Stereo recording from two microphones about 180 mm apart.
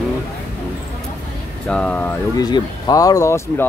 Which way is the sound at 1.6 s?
5° left (ahead or behind).